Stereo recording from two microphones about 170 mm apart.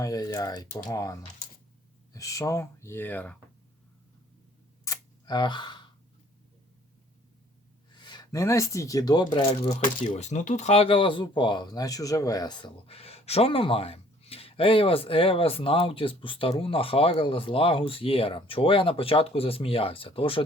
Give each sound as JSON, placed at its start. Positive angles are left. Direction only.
{"t": 0.0, "sound": "speech", "side_deg": 20}
{"t": 2.1, "sound": "speech", "side_deg": 20}
{"t": 4.9, "sound": "a sound", "side_deg": 25}
{"t": 7.9, "sound": "speech", "side_deg": 25}
{"t": 9.8, "sound": "speech", "side_deg": 45}